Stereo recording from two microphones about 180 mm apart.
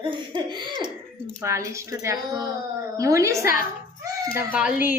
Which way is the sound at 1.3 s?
15° right (ahead or behind).